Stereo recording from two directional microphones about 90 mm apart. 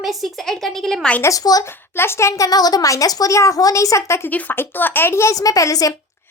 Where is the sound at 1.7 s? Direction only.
25° left (ahead or behind).